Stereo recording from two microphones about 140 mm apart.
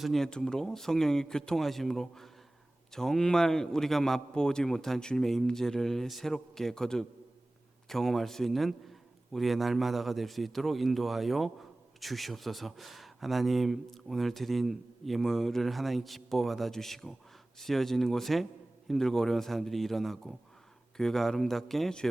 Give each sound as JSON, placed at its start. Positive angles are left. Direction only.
{"t": 0.0, "sound": "speech", "side_deg": 0}